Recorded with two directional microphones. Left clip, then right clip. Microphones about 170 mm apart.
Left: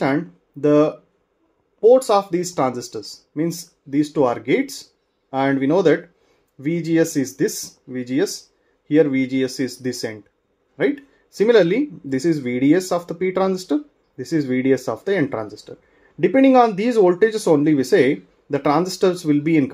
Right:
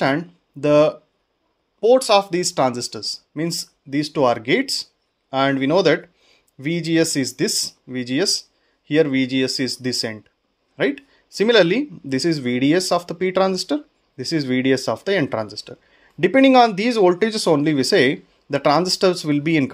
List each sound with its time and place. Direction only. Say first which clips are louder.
0.0 s speech: right 1 dB; 30° right (ahead or behind)